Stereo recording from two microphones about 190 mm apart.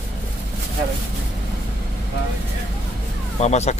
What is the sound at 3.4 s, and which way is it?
Speech, 35° left (ahead or behind).